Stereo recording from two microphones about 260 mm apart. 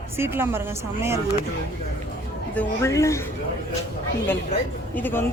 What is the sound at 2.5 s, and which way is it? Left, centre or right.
Speech, centre.